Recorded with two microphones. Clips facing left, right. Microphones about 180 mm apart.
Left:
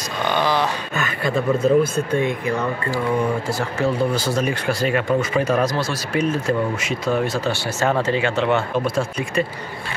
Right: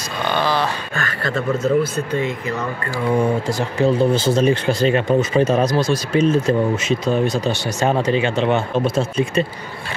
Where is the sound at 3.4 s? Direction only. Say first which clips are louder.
Right 3 dB; 20° right (ahead or behind).